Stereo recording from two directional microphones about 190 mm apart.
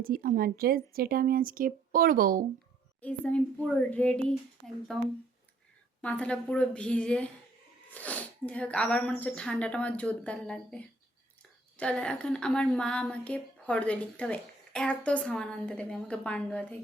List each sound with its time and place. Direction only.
0.0 s speech: 50° right (ahead or behind)
3.0 s speech: 5° left (ahead or behind)
6.0 s a woman's voice: 5° left (ahead or behind)